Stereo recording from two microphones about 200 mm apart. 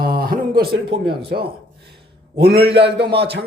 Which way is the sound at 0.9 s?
25° right (ahead or behind).